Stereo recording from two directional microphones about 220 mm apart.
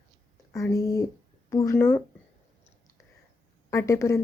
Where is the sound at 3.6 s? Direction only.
15° left (ahead or behind).